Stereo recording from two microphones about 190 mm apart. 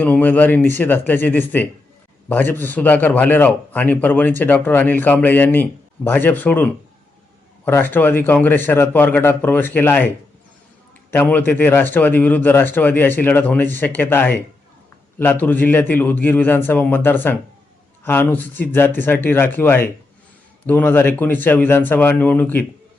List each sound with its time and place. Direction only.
0.0 s a man's voice: 10° left (ahead or behind)
11.1 s a man's voice: 10° left (ahead or behind)